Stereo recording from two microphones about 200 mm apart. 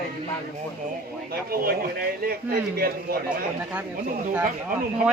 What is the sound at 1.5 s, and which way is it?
A man's voice, 50° right (ahead or behind).